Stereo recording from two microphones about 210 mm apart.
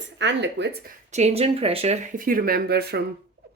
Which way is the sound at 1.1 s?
30° right (ahead or behind).